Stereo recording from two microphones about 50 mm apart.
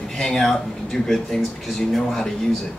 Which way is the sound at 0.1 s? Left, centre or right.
Centre.